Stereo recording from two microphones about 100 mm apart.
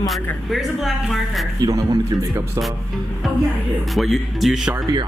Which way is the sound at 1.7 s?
40° right (ahead or behind).